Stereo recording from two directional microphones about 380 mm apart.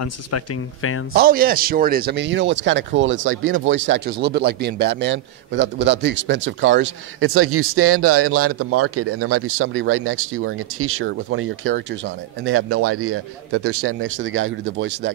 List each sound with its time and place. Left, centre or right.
1.1 s a man's voice: right